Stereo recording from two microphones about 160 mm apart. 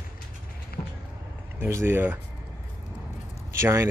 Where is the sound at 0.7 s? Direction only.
75° left (ahead or behind).